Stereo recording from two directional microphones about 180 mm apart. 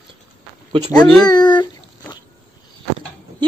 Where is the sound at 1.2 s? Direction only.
20° left (ahead or behind).